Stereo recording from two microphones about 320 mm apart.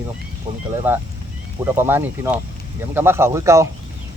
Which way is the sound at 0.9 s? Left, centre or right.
Centre.